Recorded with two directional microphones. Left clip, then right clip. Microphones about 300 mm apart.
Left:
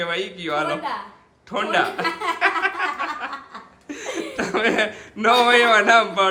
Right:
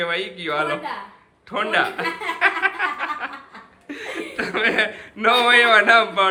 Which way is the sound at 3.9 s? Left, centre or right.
Centre.